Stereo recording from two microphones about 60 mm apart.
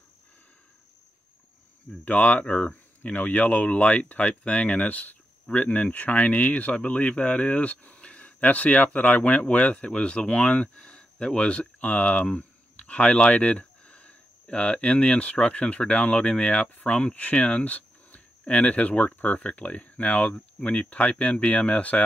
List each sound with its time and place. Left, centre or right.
2.0 s speech: left